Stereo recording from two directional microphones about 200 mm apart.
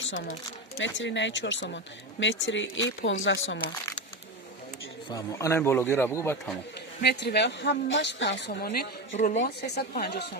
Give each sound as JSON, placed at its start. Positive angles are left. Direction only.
{"t": 0.0, "sound": "speech", "side_deg": 70}
{"t": 5.0, "sound": "speech", "side_deg": 15}
{"t": 7.0, "sound": "a woman's voice", "side_deg": 55}
{"t": 9.1, "sound": "speech", "side_deg": 40}